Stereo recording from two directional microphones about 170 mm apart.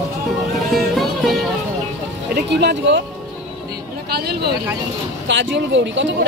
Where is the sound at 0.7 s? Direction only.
Centre (ahead or behind).